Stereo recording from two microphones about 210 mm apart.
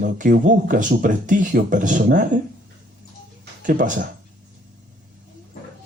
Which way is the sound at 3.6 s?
40° right (ahead or behind).